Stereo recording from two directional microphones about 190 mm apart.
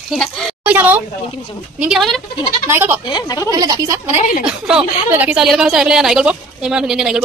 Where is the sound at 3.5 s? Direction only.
20° right (ahead or behind).